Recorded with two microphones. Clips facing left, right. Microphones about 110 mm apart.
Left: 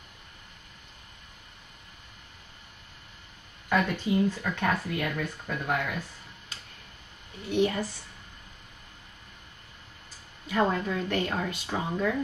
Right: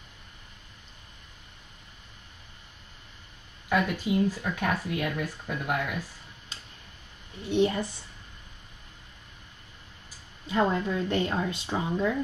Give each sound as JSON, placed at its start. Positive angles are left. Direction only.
{"t": 3.6, "sound": "a sound", "side_deg": -5}
{"t": 4.0, "sound": "speech", "side_deg": -10}
{"t": 7.4, "sound": "speech", "side_deg": -30}
{"t": 10.4, "sound": "speech", "side_deg": -25}